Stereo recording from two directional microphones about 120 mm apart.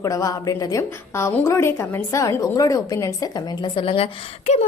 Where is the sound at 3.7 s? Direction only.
50° left (ahead or behind).